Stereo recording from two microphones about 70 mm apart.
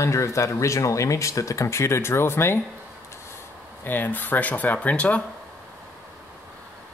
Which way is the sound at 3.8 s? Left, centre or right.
Left.